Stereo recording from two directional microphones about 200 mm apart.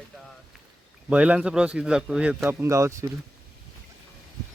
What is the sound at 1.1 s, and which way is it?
Speech, 5° right (ahead or behind).